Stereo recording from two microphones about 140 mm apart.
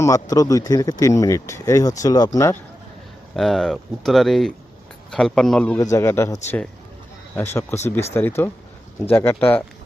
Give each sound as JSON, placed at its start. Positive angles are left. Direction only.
{"t": 0.0, "sound": "speech", "side_deg": 25}
{"t": 3.3, "sound": "speech", "side_deg": 0}
{"t": 5.7, "sound": "speech", "side_deg": 20}